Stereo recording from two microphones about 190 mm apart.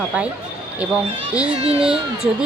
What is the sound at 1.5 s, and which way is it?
Speech, 30° right (ahead or behind).